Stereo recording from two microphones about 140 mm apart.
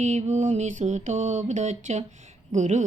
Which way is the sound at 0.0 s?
55° right (ahead or behind).